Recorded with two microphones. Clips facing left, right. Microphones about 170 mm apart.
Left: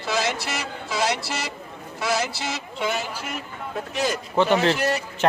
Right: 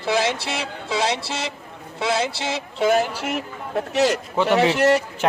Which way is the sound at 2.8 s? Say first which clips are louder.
Right 9 dB; 45° right (ahead or behind).